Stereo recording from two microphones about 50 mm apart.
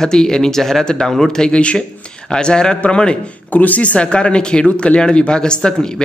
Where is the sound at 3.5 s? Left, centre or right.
Left.